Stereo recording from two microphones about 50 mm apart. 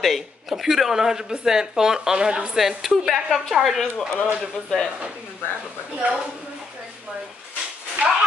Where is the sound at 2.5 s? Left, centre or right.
Centre.